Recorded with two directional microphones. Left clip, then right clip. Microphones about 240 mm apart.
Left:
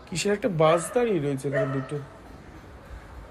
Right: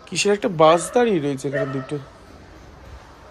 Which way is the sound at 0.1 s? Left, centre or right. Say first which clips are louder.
Right 6 dB; centre.